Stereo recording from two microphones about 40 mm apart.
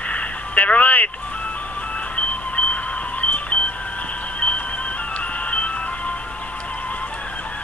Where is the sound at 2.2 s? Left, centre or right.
Left.